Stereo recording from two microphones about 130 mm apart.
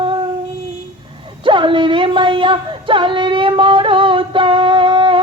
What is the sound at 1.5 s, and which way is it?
Female singing, 40° right (ahead or behind).